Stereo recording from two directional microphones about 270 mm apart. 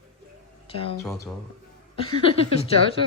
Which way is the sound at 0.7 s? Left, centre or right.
Left.